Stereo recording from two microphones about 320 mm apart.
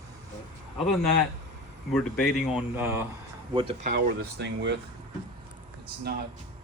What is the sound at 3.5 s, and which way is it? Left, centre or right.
Speech, centre.